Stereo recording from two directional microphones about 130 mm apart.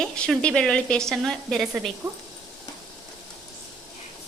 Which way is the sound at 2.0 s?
25° right (ahead or behind).